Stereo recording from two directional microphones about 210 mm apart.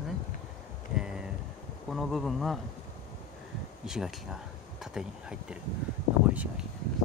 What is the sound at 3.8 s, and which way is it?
Speech, 5° right (ahead or behind).